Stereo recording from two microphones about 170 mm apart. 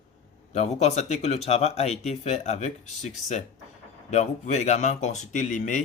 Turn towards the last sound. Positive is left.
turn(degrees=50)  # may be behind; listen again after turning